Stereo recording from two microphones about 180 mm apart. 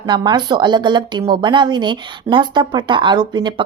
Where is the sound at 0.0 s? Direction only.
25° right (ahead or behind).